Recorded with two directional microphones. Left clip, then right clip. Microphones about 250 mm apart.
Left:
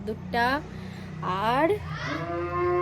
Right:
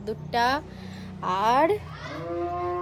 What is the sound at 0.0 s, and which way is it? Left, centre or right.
A woman's voice, centre.